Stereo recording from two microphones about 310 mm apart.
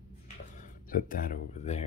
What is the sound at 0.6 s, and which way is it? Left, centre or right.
Speech, left.